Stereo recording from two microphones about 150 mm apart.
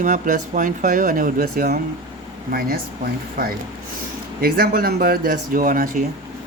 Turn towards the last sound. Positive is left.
turn(degrees=-65)  # may be behind; listen again after turning